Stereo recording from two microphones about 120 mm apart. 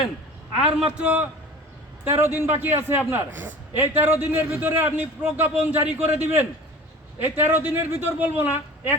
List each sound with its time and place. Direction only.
0.6 s a man's voice: 10° right (ahead or behind)